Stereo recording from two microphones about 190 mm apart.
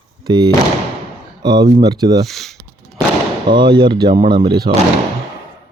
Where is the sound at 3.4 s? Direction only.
25° right (ahead or behind).